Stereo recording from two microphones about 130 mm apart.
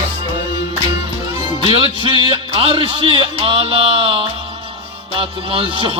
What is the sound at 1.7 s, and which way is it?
Music, 40° right (ahead or behind).